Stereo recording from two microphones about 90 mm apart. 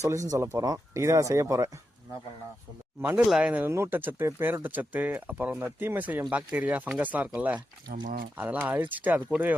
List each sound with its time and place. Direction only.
0.0 s speech: 35° right (ahead or behind)
3.0 s speech: 20° right (ahead or behind)
3.2 s speech: 10° right (ahead or behind)
3.7 s speech: 25° right (ahead or behind)